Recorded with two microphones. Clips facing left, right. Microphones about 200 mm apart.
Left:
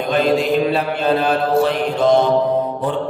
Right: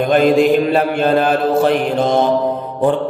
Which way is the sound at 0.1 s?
50° right (ahead or behind).